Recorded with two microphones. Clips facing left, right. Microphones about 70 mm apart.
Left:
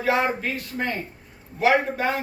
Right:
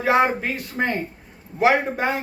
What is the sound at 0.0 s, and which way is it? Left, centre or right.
A man's voice, right.